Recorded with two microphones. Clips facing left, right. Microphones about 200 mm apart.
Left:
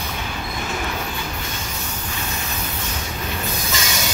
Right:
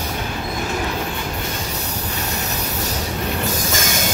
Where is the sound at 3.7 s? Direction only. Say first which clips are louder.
Right 3 dB; 50° right (ahead or behind).